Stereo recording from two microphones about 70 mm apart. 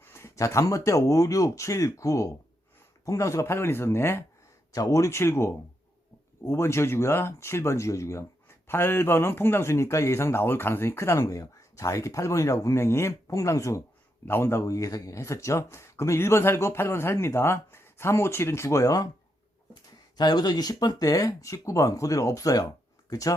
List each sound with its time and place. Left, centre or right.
0.0 s speech: left
4.7 s speech: left
14.3 s speech: left
14.7 s speech: left
20.1 s speech: left